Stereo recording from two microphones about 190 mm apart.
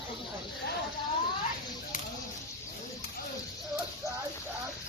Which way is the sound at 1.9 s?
45° left (ahead or behind).